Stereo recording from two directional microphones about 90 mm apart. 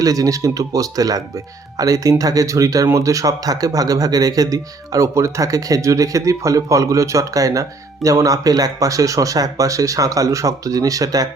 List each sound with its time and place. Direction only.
0.0 s a man's voice: 40° right (ahead or behind)